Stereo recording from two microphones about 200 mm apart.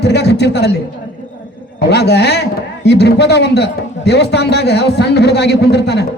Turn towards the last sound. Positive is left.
turn(degrees=55)  # may be behind; listen again after turning